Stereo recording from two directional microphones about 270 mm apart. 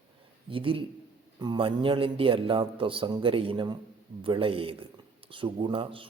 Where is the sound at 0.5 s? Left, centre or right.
Centre.